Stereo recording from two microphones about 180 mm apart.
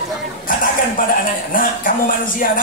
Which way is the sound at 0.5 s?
50° left (ahead or behind).